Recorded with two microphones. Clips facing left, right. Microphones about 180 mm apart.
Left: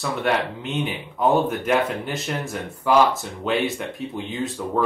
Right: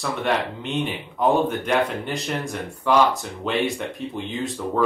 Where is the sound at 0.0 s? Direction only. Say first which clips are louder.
Left 1 dB; centre (ahead or behind).